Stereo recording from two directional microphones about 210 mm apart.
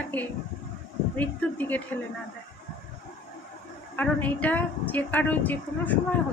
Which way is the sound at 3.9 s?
10° left (ahead or behind).